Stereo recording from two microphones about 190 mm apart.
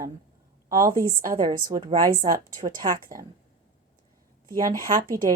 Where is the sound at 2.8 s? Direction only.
30° right (ahead or behind).